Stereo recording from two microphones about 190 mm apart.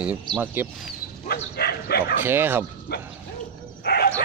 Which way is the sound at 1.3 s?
55° left (ahead or behind).